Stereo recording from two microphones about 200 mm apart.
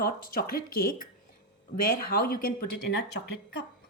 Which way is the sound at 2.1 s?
50° left (ahead or behind).